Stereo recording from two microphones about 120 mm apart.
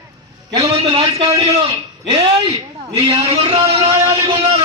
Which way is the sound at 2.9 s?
30° right (ahead or behind).